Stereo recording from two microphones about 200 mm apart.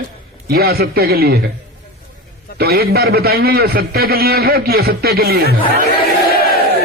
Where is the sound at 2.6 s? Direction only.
50° right (ahead or behind).